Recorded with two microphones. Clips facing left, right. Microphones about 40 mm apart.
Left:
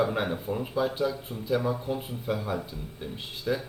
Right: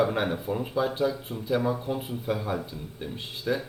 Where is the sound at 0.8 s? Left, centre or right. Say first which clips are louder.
Right 1 dB; centre.